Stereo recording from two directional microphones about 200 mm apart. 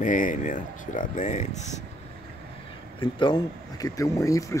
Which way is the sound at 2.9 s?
25° left (ahead or behind).